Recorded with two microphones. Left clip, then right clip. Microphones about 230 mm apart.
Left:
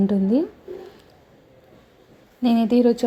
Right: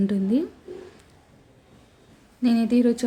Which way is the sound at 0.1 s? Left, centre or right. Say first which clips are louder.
Left 4 dB; centre.